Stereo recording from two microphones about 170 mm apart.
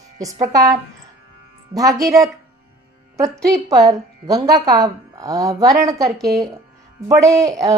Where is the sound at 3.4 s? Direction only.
20° right (ahead or behind).